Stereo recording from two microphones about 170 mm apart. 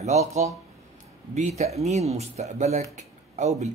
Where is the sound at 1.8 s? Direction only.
40° right (ahead or behind).